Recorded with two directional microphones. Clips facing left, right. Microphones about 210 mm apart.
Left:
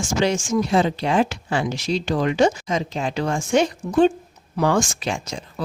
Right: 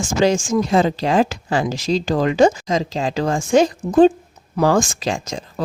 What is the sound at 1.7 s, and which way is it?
Speech, 90° right.